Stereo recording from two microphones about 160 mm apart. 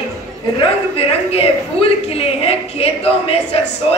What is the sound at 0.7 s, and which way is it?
A woman's voice, 35° left (ahead or behind).